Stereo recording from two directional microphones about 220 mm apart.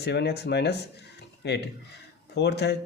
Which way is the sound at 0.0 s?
50° left (ahead or behind).